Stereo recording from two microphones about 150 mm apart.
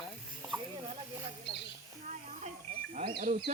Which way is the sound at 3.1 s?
80° right.